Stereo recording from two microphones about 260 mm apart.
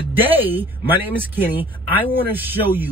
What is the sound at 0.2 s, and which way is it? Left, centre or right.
Speech, centre.